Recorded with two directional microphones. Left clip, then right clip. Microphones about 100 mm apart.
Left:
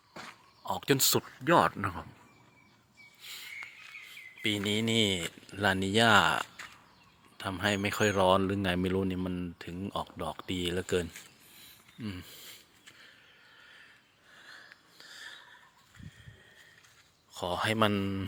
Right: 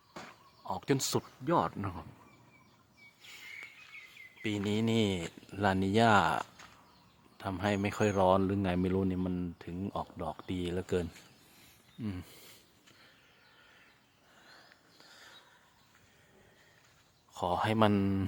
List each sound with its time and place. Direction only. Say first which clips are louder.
0.6 s speech: left 5 dB; centre (ahead or behind)
1.5 s speech: left 7 dB; 15° left (ahead or behind)
4.4 s speech: left 3 dB; 20° right (ahead or behind)
11.5 s a sound: left 2 dB; 40° right (ahead or behind)
15.0 s a sound: left 9 dB; 20° right (ahead or behind)
17.3 s speech: even; 35° right (ahead or behind)
17.9 s a man's voice: right 1 dB; 50° right (ahead or behind)